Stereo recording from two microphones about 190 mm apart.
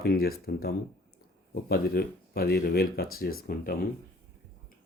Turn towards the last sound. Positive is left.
turn(degrees=50)  # may be behind; listen again after turning